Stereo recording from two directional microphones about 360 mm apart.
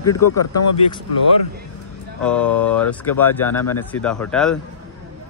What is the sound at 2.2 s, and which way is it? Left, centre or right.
Speech, centre.